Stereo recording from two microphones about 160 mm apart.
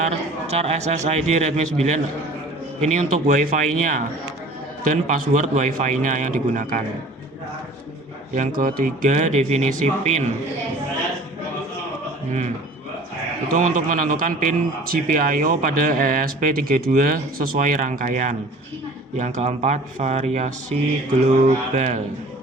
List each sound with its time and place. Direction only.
0.0 s a man's voice: 40° right (ahead or behind)
2.8 s a man's voice: 50° right (ahead or behind)
8.4 s a man's voice: 60° right (ahead or behind); by 10.2 s 45° right (ahead or behind)
13.5 s a man's voice: 55° right (ahead or behind)